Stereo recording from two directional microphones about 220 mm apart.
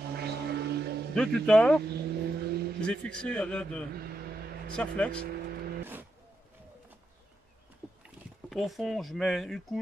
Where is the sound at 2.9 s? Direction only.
5° left (ahead or behind).